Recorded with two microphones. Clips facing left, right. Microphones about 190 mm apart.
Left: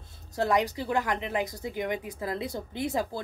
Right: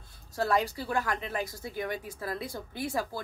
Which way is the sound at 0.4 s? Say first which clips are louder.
Left 2 dB; 20° left (ahead or behind).